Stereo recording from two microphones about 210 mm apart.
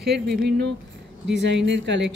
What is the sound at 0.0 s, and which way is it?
Speech, 50° right (ahead or behind).